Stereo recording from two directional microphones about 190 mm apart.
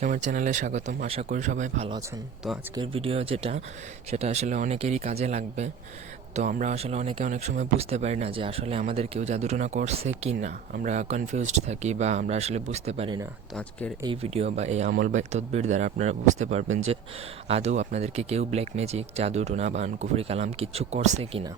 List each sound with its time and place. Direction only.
0.0 s speech: 40° right (ahead or behind)
2.7 s speech: 30° right (ahead or behind)